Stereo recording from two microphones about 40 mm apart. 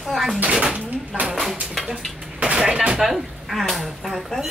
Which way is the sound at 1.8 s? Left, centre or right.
Centre.